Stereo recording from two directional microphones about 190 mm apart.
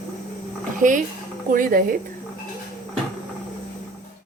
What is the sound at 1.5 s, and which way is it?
Speech, 45° right (ahead or behind).